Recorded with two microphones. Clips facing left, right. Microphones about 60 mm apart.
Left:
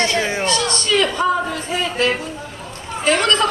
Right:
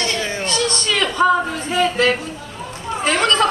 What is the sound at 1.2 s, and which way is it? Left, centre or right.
Speech, right.